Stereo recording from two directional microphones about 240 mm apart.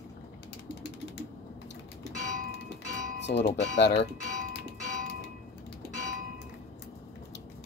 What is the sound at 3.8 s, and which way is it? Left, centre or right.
Speech, left.